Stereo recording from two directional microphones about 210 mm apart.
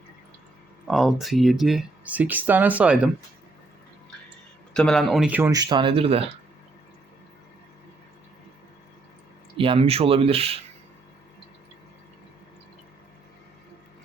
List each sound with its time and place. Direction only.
0.9 s speech: centre (ahead or behind)
4.7 s speech: 5° left (ahead or behind); by 6.3 s 25° right (ahead or behind)
9.6 s speech: 25° right (ahead or behind)